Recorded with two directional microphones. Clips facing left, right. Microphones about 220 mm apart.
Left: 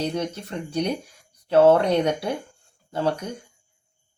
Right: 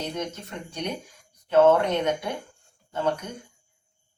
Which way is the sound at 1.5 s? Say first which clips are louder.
Left 2 dB; 35° left (ahead or behind).